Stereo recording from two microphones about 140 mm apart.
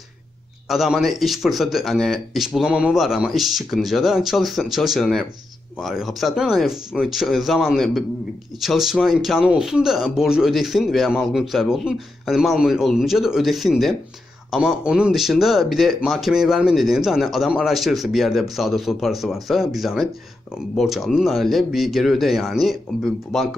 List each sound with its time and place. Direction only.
0.7 s speech: 5° right (ahead or behind)